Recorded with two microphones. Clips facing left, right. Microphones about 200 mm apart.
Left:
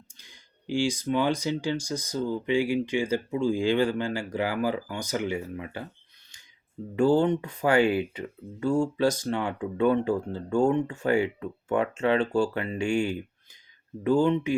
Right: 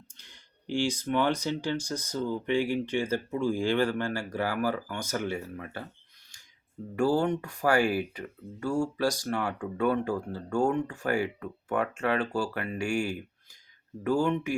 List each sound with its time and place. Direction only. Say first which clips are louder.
0.1 s speech: left 1 dB; 10° left (ahead or behind)
6.9 s speech: left 4 dB; 20° left (ahead or behind)